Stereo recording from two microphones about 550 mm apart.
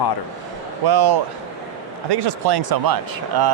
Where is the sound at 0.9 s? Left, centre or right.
Right.